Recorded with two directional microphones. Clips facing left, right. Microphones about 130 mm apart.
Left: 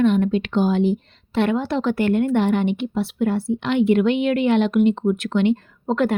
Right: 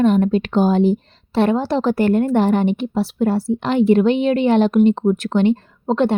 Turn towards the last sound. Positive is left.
turn(degrees=-30)  # may be behind; listen again after turning